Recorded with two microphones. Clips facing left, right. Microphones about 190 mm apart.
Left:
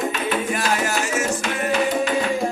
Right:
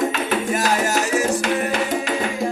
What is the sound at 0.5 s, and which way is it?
Music, 40° right (ahead or behind).